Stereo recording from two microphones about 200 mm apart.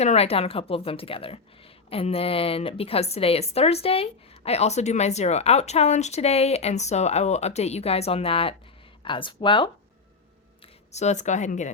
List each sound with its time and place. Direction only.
0.0 s a woman's voice: 30° left (ahead or behind)
10.9 s a woman's voice: 35° left (ahead or behind)